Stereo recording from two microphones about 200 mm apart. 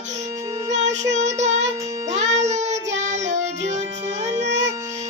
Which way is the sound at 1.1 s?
35° right (ahead or behind).